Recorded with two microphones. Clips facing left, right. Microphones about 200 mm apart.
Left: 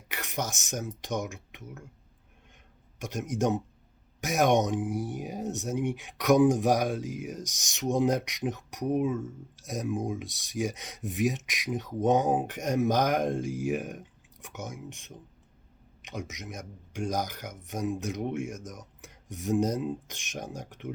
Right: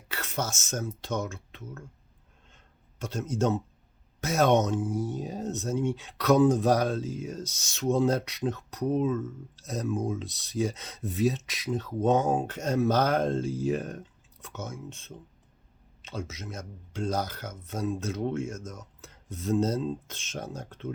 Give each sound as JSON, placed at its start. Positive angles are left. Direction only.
{"t": 0.1, "sound": "speech", "side_deg": 15}
{"t": 3.0, "sound": "speech", "side_deg": 15}